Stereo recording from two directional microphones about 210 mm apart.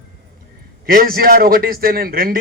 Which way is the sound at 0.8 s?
45° right (ahead or behind).